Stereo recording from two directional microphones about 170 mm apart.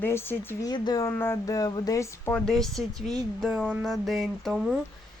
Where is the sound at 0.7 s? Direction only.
25° left (ahead or behind); by 4.8 s 5° right (ahead or behind).